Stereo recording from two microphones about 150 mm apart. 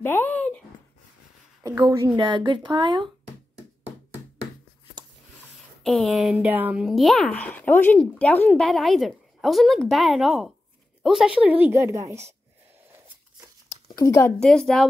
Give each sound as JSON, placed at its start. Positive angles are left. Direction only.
{"t": 0.0, "sound": "a sound", "side_deg": 15}
{"t": 1.6, "sound": "a woman's voice", "side_deg": -25}
{"t": 5.9, "sound": "a woman's voice", "side_deg": 0}
{"t": 13.9, "sound": "speech", "side_deg": 20}
{"t": 14.4, "sound": "a woman's voice", "side_deg": 5}